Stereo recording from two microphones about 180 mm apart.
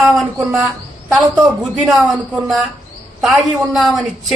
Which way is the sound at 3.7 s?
Centre (ahead or behind).